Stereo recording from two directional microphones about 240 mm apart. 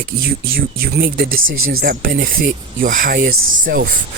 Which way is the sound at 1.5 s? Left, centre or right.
Right.